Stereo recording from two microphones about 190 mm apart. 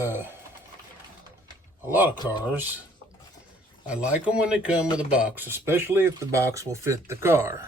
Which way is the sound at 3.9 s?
5° right (ahead or behind).